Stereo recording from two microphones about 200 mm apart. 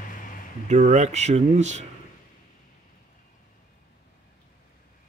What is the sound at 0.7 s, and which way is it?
Speech, 35° right (ahead or behind).